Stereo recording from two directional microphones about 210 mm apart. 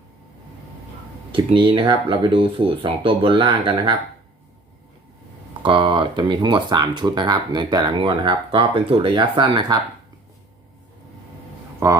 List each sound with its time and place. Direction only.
1.3 s speech: 25° right (ahead or behind)
5.6 s speech: 25° right (ahead or behind)
11.8 s speech: 15° right (ahead or behind)